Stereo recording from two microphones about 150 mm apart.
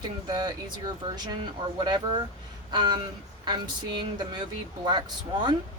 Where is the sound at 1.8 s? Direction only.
30° right (ahead or behind).